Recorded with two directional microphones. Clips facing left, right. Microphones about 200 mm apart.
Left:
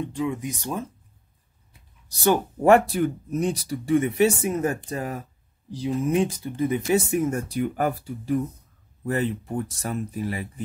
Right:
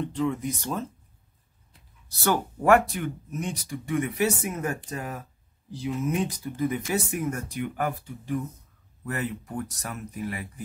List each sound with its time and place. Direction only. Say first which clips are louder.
0.0 s speech: even; 15° left (ahead or behind); by 10.4 s 30° left (ahead or behind)